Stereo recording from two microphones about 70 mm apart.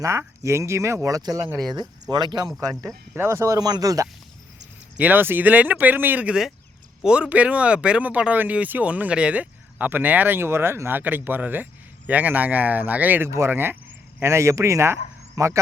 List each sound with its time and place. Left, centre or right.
0.0 s speech: right
1.5 s speech: right
3.2 s speech: right
3.6 s speech: right
4.9 s speech: right
14.2 s speech: right